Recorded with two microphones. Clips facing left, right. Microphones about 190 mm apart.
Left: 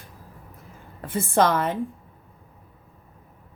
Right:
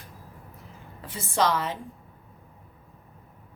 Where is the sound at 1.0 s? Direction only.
55° left (ahead or behind).